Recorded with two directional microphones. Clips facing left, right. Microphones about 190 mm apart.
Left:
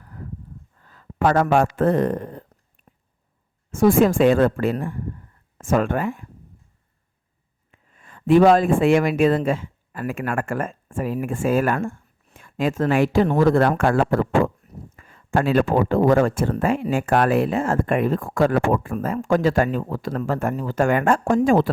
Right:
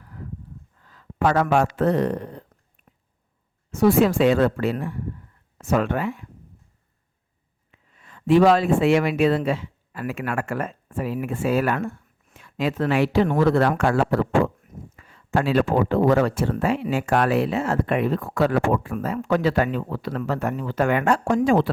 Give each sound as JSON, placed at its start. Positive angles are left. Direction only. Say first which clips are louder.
{"t": 0.0, "sound": "a sound", "louder": "left 1 dB", "side_deg": 45}
{"t": 0.8, "sound": "a man's voice", "louder": "left 1 dB", "side_deg": 50}
{"t": 2.8, "sound": "whispering", "louder": "left 2 dB", "side_deg": 35}
{"t": 3.7, "sound": "speech", "louder": "left 2 dB", "side_deg": 50}
{"t": 7.7, "sound": "speech", "louder": "left 1 dB", "side_deg": 45}
{"t": 14.9, "sound": "a sound", "louder": "left 2 dB", "side_deg": 50}
{"t": 15.8, "sound": "speech", "louder": "left 2 dB", "side_deg": 45}